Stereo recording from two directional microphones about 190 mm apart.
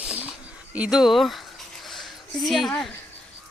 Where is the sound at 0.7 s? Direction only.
5° right (ahead or behind).